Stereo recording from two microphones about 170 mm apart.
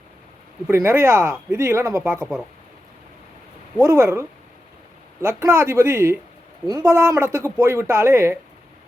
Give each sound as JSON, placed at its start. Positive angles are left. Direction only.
{"t": 0.7, "sound": "speech", "side_deg": -15}
{"t": 3.8, "sound": "speech", "side_deg": -15}